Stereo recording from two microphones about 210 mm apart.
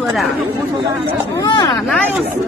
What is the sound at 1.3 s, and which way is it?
Speech, 15° left (ahead or behind).